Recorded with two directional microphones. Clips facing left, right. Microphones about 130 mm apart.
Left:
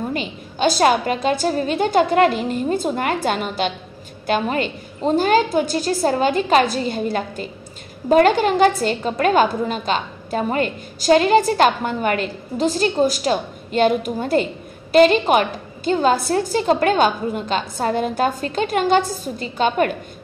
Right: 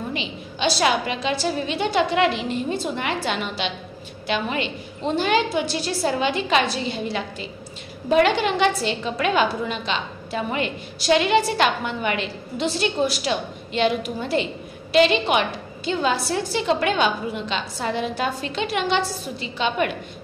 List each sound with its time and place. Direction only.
0.1 s a woman's voice: 45° left (ahead or behind)